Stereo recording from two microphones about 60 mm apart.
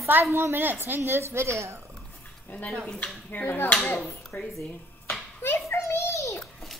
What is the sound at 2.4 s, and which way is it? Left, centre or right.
Speech, left.